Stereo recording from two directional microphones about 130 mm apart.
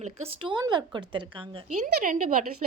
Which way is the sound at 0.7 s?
35° right (ahead or behind).